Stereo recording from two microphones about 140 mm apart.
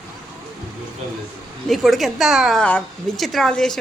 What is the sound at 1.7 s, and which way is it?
A woman's voice, centre (ahead or behind).